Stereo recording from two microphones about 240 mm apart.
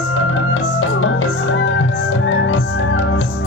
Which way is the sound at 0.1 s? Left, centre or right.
Left.